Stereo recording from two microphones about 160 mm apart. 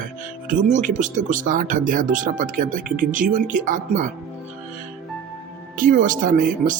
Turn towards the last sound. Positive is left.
turn(degrees=-55)  # may be behind; listen again after turning